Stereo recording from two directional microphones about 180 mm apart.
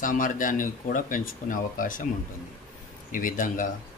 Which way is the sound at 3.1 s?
50° left (ahead or behind).